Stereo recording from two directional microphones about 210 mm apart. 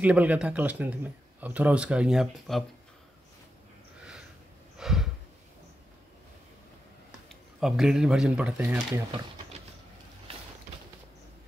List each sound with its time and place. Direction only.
0.0 s speech: 5° right (ahead or behind)
4.7 s a sound: centre (ahead or behind)
7.2 s speech: centre (ahead or behind)